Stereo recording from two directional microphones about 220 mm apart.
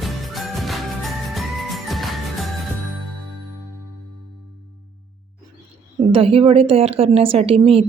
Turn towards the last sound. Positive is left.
turn(degrees=-25)  # may be behind; listen again after turning